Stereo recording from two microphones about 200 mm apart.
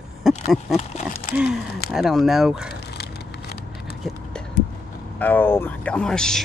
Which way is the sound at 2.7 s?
55° left (ahead or behind).